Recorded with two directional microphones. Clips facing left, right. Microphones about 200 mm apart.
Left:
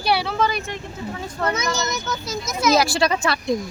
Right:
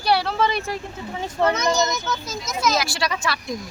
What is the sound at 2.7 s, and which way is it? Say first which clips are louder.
Speech: left 6 dB; 35° left (ahead or behind).